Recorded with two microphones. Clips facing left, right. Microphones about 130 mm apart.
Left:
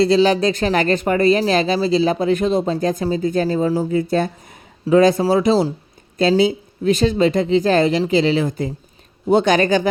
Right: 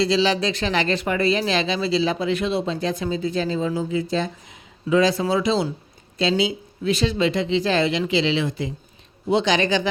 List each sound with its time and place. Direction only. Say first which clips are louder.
0.0 s speech: left 6 dB; 50° left (ahead or behind)